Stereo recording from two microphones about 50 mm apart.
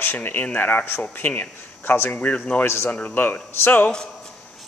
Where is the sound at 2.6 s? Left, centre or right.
Left.